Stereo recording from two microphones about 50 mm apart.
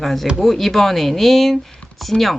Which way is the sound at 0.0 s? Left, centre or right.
Centre.